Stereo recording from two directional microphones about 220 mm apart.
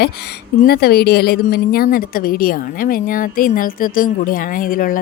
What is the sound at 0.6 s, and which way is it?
A woman's voice, 45° left (ahead or behind).